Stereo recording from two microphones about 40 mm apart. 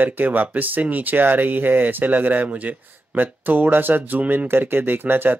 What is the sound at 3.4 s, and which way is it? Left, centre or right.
Speech, right.